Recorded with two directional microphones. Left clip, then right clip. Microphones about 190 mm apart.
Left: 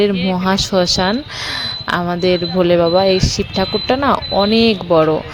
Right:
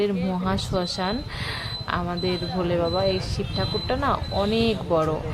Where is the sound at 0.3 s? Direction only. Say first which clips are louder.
Left 10 dB; 40° left (ahead or behind).